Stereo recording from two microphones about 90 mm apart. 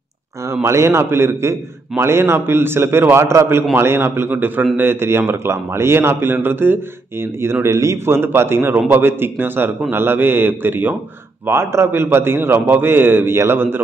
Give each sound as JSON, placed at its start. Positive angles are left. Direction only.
{"t": 0.5, "sound": "a man's voice", "side_deg": -30}